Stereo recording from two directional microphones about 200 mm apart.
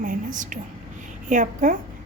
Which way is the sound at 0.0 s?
40° right (ahead or behind).